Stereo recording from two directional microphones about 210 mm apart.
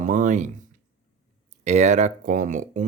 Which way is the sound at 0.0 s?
35° right (ahead or behind).